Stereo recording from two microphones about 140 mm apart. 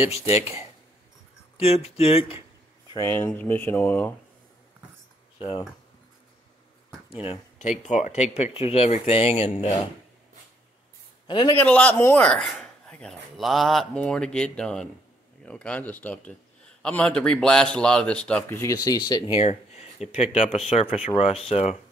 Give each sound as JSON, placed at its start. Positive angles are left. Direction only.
{"t": 1.6, "sound": "speech", "side_deg": 45}
{"t": 3.0, "sound": "a man's voice", "side_deg": 20}
{"t": 5.4, "sound": "speech", "side_deg": 35}
{"t": 7.1, "sound": "speech", "side_deg": 40}
{"t": 7.9, "sound": "speech", "side_deg": 55}
{"t": 11.2, "sound": "a man's voice", "side_deg": 35}
{"t": 11.5, "sound": "a man's voice", "side_deg": 10}
{"t": 18.5, "sound": "speech", "side_deg": 20}
{"t": 19.3, "sound": "a sound", "side_deg": 50}
{"t": 20.2, "sound": "speech", "side_deg": 50}